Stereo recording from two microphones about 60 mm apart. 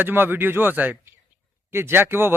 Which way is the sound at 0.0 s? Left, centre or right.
Right.